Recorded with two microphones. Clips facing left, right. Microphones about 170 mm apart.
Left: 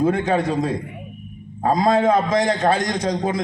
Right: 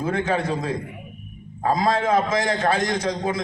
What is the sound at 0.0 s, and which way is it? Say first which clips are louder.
A man's voice: left 4 dB; 35° left (ahead or behind).